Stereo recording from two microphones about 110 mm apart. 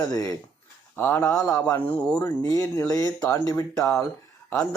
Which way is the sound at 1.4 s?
30° left (ahead or behind).